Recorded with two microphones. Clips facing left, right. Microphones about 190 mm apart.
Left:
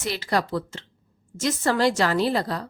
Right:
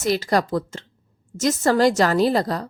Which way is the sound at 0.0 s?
45° right (ahead or behind).